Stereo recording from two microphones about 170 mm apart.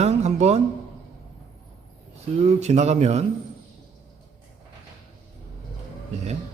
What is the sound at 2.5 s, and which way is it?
Speech, 40° right (ahead or behind).